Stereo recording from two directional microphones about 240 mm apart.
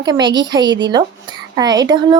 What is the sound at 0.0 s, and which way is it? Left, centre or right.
A woman's voice, centre.